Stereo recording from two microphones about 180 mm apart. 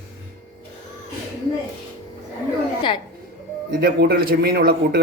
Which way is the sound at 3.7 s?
60° right (ahead or behind).